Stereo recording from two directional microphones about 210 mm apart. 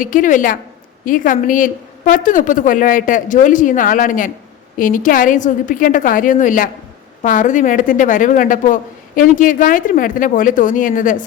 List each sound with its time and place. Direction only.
0.0 s a woman's voice: 40° left (ahead or behind)